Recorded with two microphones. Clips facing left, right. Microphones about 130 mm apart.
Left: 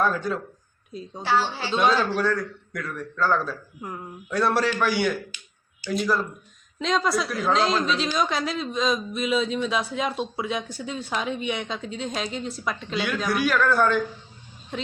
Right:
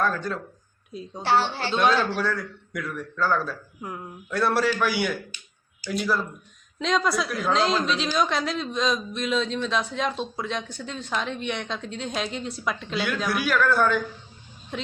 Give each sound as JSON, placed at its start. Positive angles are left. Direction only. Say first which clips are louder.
{"t": 0.0, "sound": "a woman's voice", "louder": "left 2 dB", "side_deg": 5}
{"t": 1.2, "sound": "a woman's voice", "louder": "right 1 dB", "side_deg": -65}
{"t": 1.6, "sound": "a woman's voice", "louder": "even", "side_deg": 0}